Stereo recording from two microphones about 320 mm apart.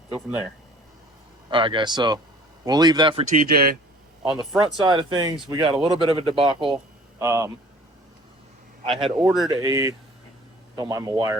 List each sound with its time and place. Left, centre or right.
1.5 s speech: centre
4.3 s speech: centre
9.1 s speech: centre